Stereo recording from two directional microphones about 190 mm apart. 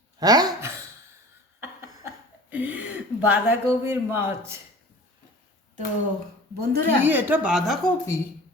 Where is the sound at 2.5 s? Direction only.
10° right (ahead or behind).